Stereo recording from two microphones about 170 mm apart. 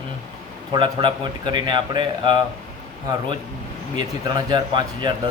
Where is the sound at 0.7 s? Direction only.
25° right (ahead or behind).